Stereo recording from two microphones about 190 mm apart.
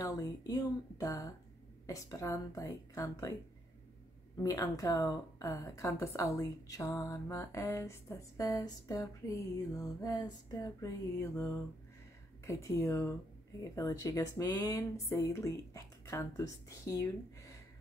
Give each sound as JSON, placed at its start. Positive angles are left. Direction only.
{"t": 0.0, "sound": "a woman's voice", "side_deg": 20}
{"t": 4.4, "sound": "a woman's voice", "side_deg": 20}